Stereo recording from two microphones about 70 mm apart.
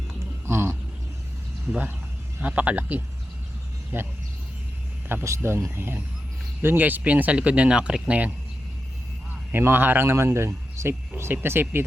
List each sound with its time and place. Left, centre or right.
0.4 s a sound: right
1.7 s speech: right
3.9 s speech: right
5.2 s speech: right; by 8.3 s centre
9.5 s speech: right